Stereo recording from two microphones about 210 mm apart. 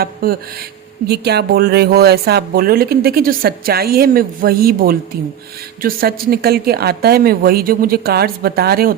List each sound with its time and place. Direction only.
0.0 s speech: 45° right (ahead or behind)